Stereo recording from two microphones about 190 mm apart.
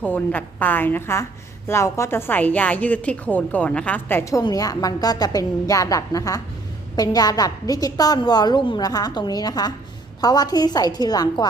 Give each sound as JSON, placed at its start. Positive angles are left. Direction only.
{"t": 0.0, "sound": "a woman's voice", "side_deg": 10}